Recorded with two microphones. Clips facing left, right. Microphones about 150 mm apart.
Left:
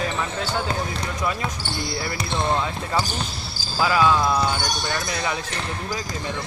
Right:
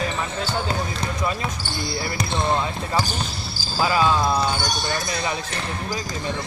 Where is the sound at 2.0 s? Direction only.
15° right (ahead or behind).